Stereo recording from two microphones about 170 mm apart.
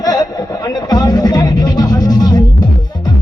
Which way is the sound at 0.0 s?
20° left (ahead or behind).